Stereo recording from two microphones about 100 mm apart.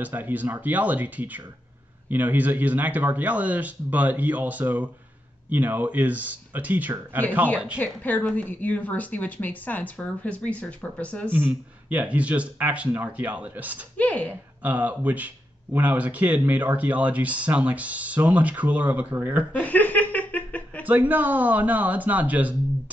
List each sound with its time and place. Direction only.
0.0 s speech: 15° right (ahead or behind)
8.0 s speech: 15° left (ahead or behind)
11.3 s speech: 15° right (ahead or behind)
13.9 s speech: 15° left (ahead or behind)
14.6 s speech: 15° right (ahead or behind)
19.6 s chuckle: 15° left (ahead or behind)
20.8 s speech: 15° right (ahead or behind)